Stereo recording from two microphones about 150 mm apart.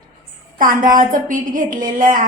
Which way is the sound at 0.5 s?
65° right (ahead or behind).